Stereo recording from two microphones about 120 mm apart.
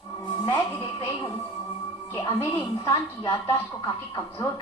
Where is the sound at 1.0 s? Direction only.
30° left (ahead or behind).